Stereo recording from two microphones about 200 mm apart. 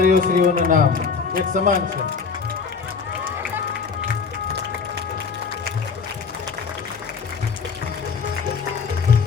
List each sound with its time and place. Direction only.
0.0 s speech: 45° right (ahead or behind)